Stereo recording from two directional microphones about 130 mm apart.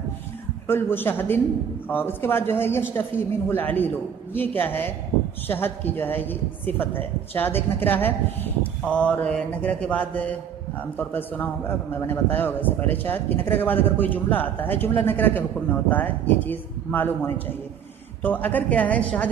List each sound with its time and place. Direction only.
0.7 s a man's voice: 15° left (ahead or behind)